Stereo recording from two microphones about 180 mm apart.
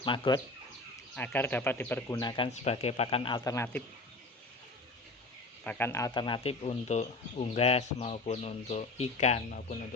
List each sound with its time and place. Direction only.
0.0 s speech: 25° left (ahead or behind)
1.1 s speech: 10° left (ahead or behind)
2.2 s speech: 25° left (ahead or behind)
3.5 s speech: 10° left (ahead or behind)
5.6 s speech: 10° left (ahead or behind); by 9.7 s 45° left (ahead or behind)